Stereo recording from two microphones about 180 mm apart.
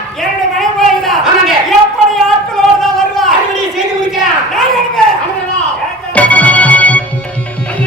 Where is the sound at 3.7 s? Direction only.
Centre (ahead or behind).